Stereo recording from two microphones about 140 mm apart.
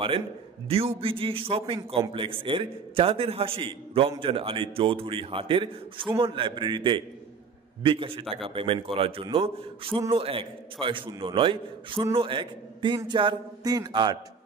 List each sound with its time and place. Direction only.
0.7 s a man's voice: 45° right (ahead or behind)